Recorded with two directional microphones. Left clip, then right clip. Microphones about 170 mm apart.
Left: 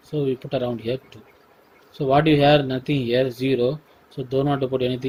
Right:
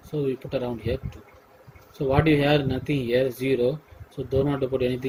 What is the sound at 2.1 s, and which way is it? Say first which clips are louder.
Speech: left 5 dB; 55° left (ahead or behind).